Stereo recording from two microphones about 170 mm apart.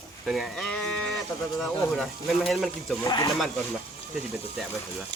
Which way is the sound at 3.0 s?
20° left (ahead or behind).